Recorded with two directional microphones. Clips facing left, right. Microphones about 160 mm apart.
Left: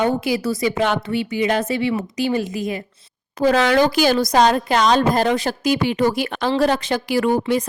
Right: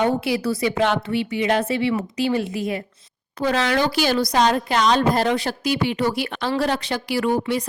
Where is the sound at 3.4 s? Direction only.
40° left (ahead or behind).